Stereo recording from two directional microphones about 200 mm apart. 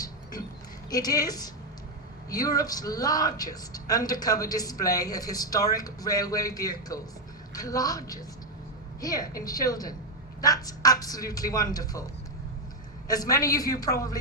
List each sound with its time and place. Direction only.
0.9 s a man's voice: 20° left (ahead or behind)
13.1 s a man's voice: 20° left (ahead or behind)